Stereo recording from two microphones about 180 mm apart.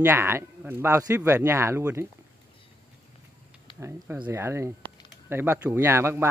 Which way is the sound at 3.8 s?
15° right (ahead or behind).